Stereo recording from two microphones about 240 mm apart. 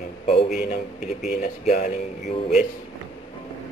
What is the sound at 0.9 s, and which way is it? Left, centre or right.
Speech, centre.